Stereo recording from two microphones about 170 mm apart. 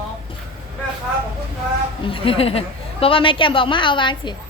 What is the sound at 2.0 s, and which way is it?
A woman's voice, 30° left (ahead or behind).